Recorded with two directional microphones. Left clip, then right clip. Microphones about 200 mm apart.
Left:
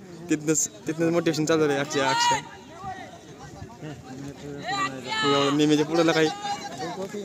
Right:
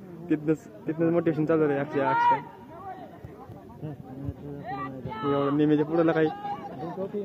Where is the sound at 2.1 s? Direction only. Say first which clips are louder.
Right 2 dB; 50° left (ahead or behind).